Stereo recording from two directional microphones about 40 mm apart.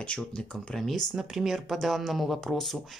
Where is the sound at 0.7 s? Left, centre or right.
Centre.